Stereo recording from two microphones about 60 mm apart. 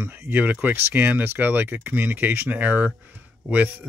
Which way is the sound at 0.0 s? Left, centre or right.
Right.